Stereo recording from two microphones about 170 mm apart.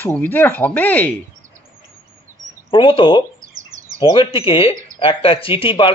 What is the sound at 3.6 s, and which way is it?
Bird, 50° right (ahead or behind).